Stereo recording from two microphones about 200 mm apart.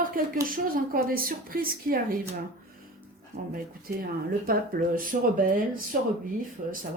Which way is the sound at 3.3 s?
50° right (ahead or behind).